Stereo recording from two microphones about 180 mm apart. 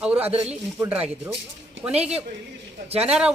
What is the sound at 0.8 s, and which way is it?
Speech, 10° right (ahead or behind).